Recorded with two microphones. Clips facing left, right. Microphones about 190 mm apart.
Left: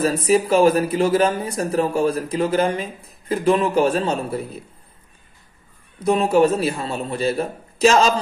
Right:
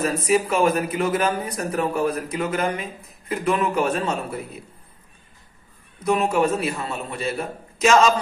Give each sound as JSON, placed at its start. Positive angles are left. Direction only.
{"t": 0.0, "sound": "speech", "side_deg": 30}
{"t": 6.0, "sound": "speech", "side_deg": 35}